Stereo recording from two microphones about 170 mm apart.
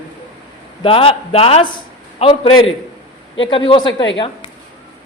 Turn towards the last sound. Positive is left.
turn(degrees=25)  # may be behind; listen again after turning